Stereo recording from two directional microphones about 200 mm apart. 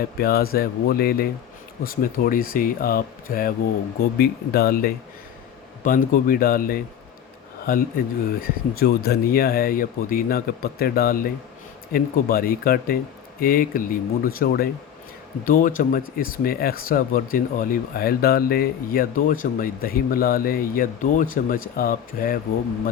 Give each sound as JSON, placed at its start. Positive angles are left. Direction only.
{"t": 0.2, "sound": "speech", "side_deg": 50}